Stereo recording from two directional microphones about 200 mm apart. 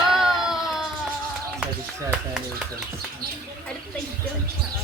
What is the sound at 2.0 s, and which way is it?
Speech, 5° right (ahead or behind).